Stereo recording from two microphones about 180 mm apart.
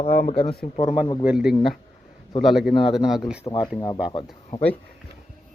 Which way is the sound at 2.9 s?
Centre (ahead or behind).